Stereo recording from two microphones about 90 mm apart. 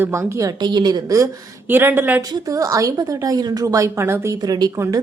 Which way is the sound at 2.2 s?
45° right (ahead or behind).